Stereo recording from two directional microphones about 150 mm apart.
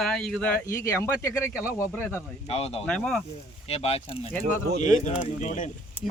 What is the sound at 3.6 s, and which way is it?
Speech, 40° left (ahead or behind).